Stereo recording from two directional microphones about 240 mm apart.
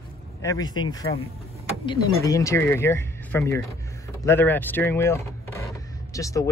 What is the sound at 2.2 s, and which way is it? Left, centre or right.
Speech, centre.